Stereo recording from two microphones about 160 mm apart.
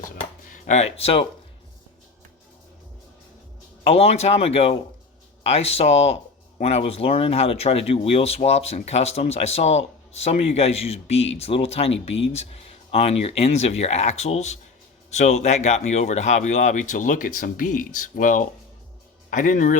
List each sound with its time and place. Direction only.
0.5 s speech: 50° left (ahead or behind)
3.8 s speech: 40° left (ahead or behind); by 19.7 s 55° left (ahead or behind)